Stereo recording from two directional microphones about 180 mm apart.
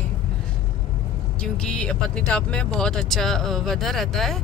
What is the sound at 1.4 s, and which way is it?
Speech, 5° left (ahead or behind).